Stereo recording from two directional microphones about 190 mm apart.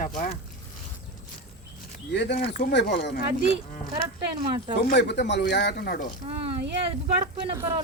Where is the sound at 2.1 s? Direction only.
60° left (ahead or behind).